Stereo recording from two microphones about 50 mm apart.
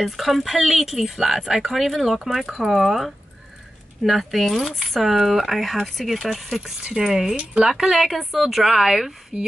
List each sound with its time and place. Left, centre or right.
0.0 s speech: centre
7.3 s speech: right
7.7 s speech: centre